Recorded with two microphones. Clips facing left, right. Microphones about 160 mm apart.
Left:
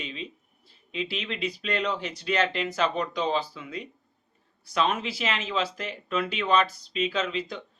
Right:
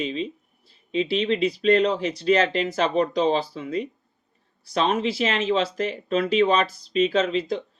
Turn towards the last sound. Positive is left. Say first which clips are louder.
# right 7 dB
turn(degrees=-40)  # may be behind; listen again after turning